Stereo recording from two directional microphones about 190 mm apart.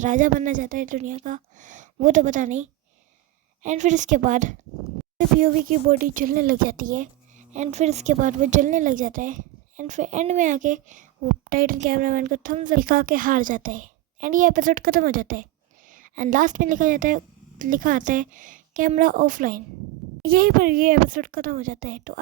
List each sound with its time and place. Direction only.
0.0 s a woman's voice: 45° right (ahead or behind)